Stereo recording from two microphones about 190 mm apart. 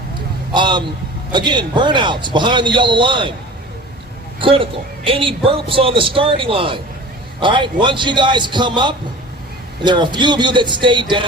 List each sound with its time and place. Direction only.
0.5 s a man's voice: 25° right (ahead or behind)
4.4 s a man's voice: 25° right (ahead or behind)